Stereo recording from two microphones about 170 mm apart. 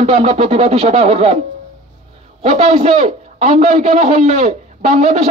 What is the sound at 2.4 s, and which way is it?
A man's voice, 40° right (ahead or behind).